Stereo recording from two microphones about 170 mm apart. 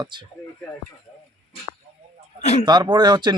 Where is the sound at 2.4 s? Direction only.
40° left (ahead or behind).